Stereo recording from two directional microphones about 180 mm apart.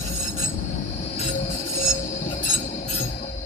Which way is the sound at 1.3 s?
50° left (ahead or behind).